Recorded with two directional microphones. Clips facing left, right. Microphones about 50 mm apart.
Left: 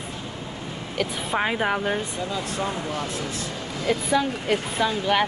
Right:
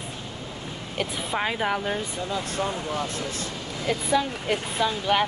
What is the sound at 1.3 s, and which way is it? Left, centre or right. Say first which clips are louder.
Speech: left 2 dB; centre.